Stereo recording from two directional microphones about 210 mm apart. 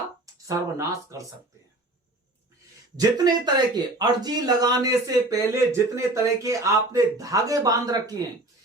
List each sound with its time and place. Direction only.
0.4 s speech: 15° right (ahead or behind)
3.0 s speech: 20° right (ahead or behind)